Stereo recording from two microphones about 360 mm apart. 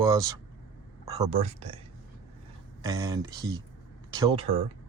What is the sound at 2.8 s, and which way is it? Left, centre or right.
Speech, centre.